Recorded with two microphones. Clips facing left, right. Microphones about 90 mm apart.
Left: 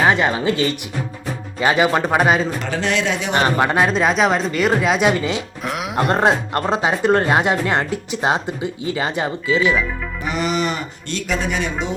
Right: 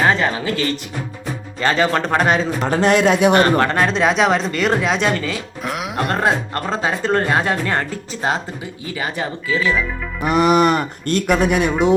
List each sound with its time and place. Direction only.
0.0 s speech: 15° left (ahead or behind)
2.6 s a man's voice: 45° right (ahead or behind)
3.4 s speech: 15° left (ahead or behind)
5.6 s speech: centre (ahead or behind)
6.1 s speech: 20° left (ahead or behind)
10.2 s speech: 55° right (ahead or behind)